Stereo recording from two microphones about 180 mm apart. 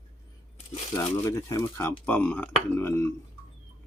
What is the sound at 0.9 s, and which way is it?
Speech, 15° left (ahead or behind).